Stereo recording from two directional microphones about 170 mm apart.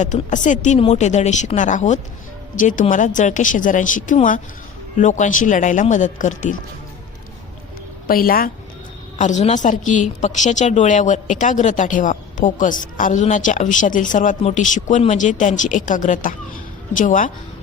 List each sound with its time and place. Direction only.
0.0 s a woman's voice: 45° left (ahead or behind)
8.0 s a woman's voice: 55° left (ahead or behind)
9.1 s a woman's voice: 45° left (ahead or behind)